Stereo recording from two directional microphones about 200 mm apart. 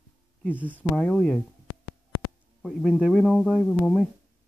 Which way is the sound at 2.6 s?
Centre (ahead or behind).